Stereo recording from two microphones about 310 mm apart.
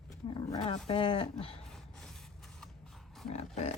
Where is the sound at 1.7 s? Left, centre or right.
Centre.